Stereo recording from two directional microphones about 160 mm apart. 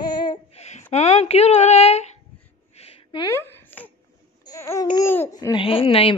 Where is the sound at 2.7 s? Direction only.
40° left (ahead or behind).